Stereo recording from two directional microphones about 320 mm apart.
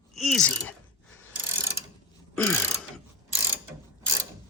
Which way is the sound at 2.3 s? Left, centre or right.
Centre.